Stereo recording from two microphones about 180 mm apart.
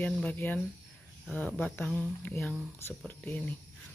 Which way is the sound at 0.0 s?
10° left (ahead or behind).